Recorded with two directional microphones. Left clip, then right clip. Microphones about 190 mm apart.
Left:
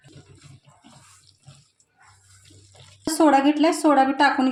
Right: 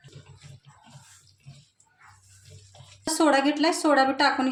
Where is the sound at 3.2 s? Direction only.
40° left (ahead or behind).